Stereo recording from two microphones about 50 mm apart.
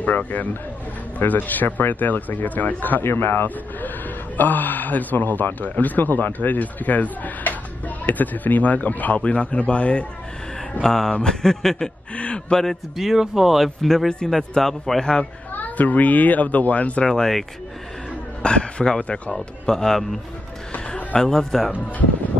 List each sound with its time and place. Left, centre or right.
0.0 s speech: left
3.0 s a man's voice: left
10.8 s a man's voice: centre
12.2 s a sound: left
12.9 s speech: centre
15.5 s speech: left
17.0 s a man's voice: centre
18.4 s speech: centre
19.3 s a man's voice: centre